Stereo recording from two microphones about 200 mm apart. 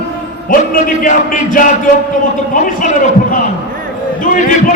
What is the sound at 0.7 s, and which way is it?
A man's voice, 40° left (ahead or behind).